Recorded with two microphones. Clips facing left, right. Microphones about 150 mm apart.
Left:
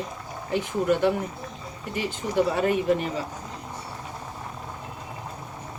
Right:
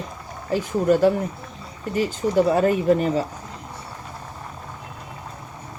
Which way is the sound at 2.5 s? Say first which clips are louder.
Right 5 dB; 40° right (ahead or behind).